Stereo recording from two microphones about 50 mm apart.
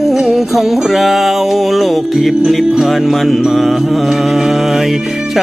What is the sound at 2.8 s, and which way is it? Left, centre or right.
Mantra, centre.